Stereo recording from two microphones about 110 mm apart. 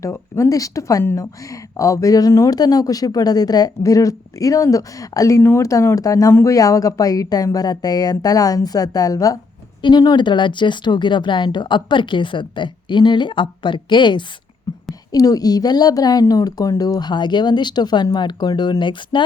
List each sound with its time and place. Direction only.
0.0 s speech: 30° left (ahead or behind); by 14.3 s 45° left (ahead or behind)
15.1 s speech: 35° left (ahead or behind)